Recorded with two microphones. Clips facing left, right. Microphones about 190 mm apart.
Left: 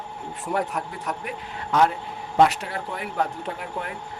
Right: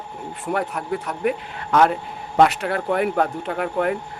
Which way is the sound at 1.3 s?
65° right (ahead or behind).